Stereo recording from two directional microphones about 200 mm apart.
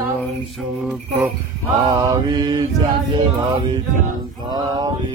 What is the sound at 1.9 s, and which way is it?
Mantra, 20° right (ahead or behind).